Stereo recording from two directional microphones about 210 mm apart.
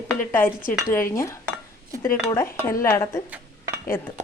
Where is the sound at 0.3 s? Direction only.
10° left (ahead or behind).